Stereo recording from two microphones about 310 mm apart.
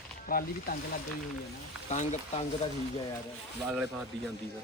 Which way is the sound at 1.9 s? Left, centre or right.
Left.